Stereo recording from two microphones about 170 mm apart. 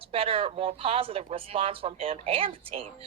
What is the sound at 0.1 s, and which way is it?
Speech, 35° right (ahead or behind).